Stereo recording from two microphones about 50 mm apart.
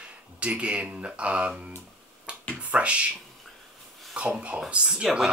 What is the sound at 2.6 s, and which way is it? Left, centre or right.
Speech, right.